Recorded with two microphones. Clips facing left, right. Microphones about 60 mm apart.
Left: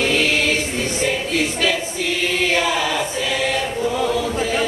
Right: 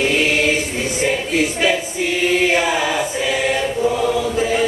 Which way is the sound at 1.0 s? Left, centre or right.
Centre.